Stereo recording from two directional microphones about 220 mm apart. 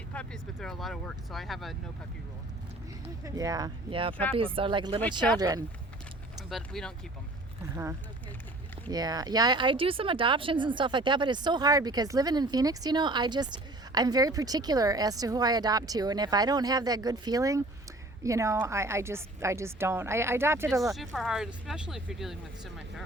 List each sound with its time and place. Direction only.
0.1 s speech: 5° left (ahead or behind)
3.2 s speech: 15° right (ahead or behind)
6.5 s speech: centre (ahead or behind)
8.9 s speech: 15° right (ahead or behind)
20.9 s speech: centre (ahead or behind)